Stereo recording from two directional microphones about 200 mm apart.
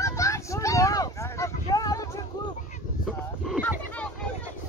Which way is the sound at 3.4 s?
Centre (ahead or behind).